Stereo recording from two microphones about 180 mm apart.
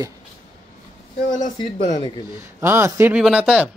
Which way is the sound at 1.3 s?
25° left (ahead or behind).